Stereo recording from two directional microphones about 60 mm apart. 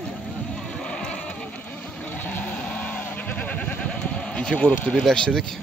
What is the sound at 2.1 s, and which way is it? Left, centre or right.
Music, left.